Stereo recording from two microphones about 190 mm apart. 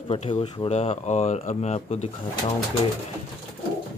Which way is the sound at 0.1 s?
30° left (ahead or behind).